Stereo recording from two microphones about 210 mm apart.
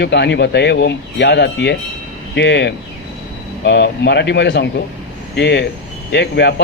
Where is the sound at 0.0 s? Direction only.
55° left (ahead or behind).